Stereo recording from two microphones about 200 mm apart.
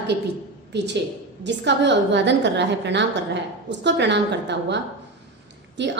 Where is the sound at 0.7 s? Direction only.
60° right (ahead or behind).